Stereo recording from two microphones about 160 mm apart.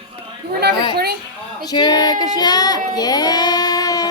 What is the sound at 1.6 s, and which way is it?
Child singing, 25° left (ahead or behind).